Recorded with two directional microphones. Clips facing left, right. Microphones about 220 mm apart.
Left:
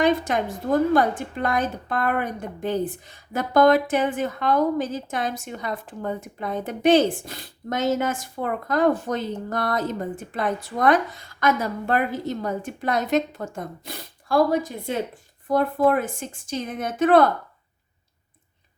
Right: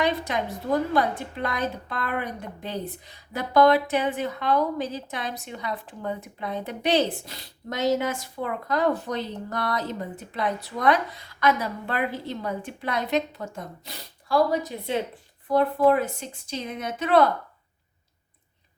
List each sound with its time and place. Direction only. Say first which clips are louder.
0.0 s a woman's voice: left 5 dB; 50° left (ahead or behind)